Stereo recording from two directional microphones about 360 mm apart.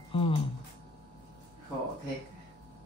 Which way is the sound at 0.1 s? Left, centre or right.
Centre.